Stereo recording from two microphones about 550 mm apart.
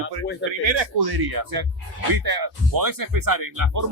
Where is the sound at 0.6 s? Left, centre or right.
Right.